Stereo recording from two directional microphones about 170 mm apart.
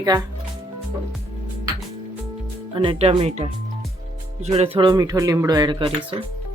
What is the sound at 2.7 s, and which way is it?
Speech, 30° right (ahead or behind).